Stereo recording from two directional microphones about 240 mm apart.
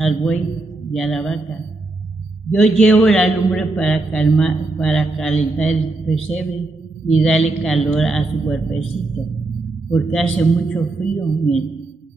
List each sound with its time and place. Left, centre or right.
0.0 s a man's voice: centre
2.5 s a man's voice: centre
9.8 s a man's voice: centre